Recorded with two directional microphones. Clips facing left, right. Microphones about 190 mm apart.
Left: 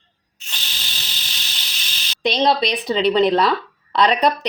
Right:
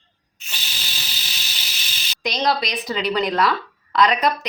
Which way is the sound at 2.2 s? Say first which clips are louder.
Left 4 dB; 25° left (ahead or behind).